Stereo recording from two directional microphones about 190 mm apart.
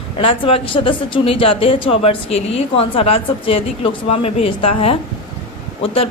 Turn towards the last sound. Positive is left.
turn(degrees=30)  # may be behind; listen again after turning